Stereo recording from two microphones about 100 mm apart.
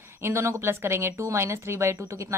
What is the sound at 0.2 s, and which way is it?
Speech, 25° right (ahead or behind).